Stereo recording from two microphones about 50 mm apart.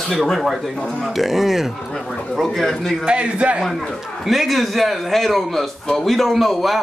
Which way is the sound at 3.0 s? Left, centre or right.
Right.